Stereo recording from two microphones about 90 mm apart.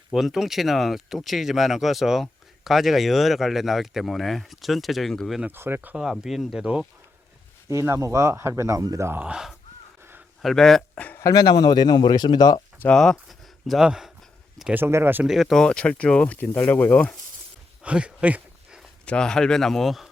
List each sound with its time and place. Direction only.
0.1 s speech: centre (ahead or behind)
5.5 s speech: 25° right (ahead or behind)
6.0 s speech: 5° right (ahead or behind)
7.7 s speech: 30° right (ahead or behind)
9.1 s speech: 10° right (ahead or behind)
10.0 s a sound: 25° right (ahead or behind)
10.4 s speech: 5° left (ahead or behind)
11.2 s speech: 45° left (ahead or behind)
12.9 s speech: 5° left (ahead or behind)
14.7 s speech: 25° right (ahead or behind)
15.2 s speech: centre (ahead or behind); by 17.2 s 15° left (ahead or behind)
17.8 s a sound: 15° right (ahead or behind)
19.0 s speech: 10° left (ahead or behind)